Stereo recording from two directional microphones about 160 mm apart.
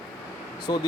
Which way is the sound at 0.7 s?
30° left (ahead or behind).